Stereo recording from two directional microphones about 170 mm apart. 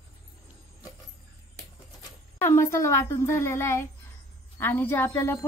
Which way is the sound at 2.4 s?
15° left (ahead or behind).